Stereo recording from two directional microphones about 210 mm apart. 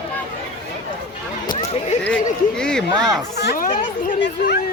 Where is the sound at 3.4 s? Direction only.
50° left (ahead or behind).